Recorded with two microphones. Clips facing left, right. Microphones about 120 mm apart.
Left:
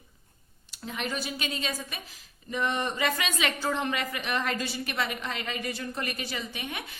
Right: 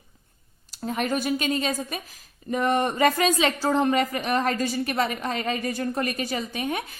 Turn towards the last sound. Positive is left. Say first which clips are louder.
# right 9 dB
turn(degrees=-45)  # may be behind; listen again after turning